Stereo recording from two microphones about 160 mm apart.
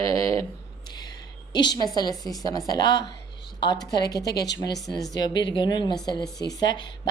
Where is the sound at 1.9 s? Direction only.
25° left (ahead or behind).